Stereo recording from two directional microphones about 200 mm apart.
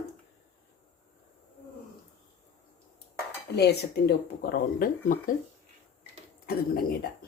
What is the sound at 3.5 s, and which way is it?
Speech, 55° left (ahead or behind).